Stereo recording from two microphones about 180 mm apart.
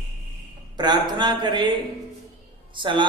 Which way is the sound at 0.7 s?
25° right (ahead or behind).